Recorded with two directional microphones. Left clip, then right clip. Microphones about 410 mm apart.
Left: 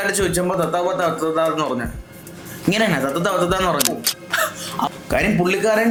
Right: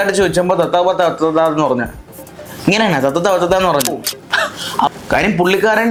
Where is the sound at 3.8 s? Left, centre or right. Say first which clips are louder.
Right 3 dB; centre.